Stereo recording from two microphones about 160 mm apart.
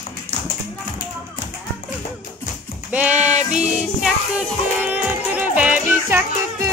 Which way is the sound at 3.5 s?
5° right (ahead or behind).